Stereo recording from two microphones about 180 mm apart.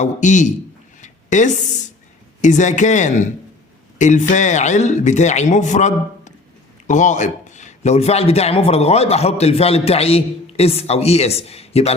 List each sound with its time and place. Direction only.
0.0 s speech: 40° left (ahead or behind)
1.0 s a sound: 40° left (ahead or behind)
2.4 s a man's voice: 45° left (ahead or behind)